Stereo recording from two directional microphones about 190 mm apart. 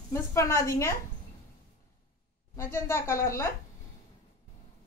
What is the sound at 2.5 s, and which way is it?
Speech, 15° left (ahead or behind).